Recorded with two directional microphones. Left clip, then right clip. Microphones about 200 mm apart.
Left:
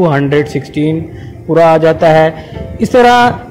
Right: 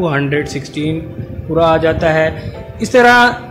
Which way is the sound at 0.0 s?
15° left (ahead or behind).